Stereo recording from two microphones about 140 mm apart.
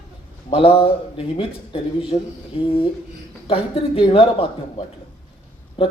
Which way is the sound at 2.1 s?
50° left (ahead or behind).